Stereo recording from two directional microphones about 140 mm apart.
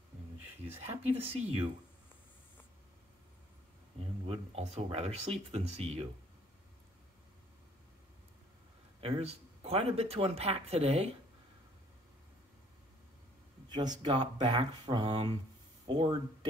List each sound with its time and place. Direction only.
1.4 s speech: 45° right (ahead or behind)
4.0 s speech: 45° right (ahead or behind)
9.0 s speech: 45° right (ahead or behind)
13.7 s speech: 30° right (ahead or behind)